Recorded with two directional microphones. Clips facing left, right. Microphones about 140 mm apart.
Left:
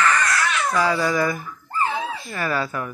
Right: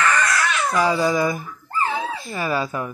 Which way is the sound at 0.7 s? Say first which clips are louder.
Right 2 dB; 15° right (ahead or behind).